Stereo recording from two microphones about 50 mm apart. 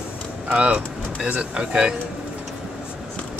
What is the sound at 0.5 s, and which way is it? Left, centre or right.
Speech, right.